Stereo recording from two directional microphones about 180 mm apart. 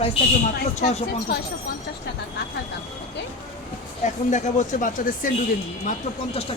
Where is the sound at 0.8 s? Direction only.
40° left (ahead or behind).